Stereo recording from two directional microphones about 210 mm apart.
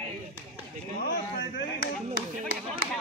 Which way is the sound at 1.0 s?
45° left (ahead or behind).